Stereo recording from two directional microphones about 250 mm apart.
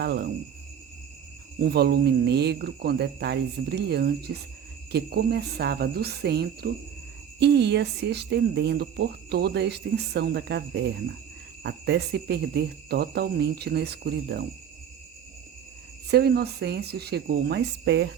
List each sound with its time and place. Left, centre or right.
0.0 s speech: right
1.6 s speech: right
16.0 s speech: right